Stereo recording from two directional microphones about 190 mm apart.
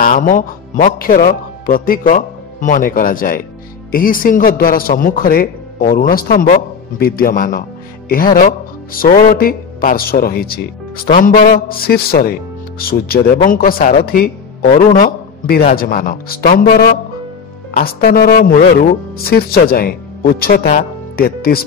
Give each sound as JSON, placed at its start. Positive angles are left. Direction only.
{"t": 0.0, "sound": "a man's voice", "side_deg": 45}